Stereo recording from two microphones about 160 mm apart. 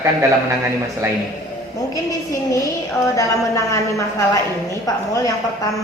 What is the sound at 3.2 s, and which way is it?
Speech, 20° left (ahead or behind).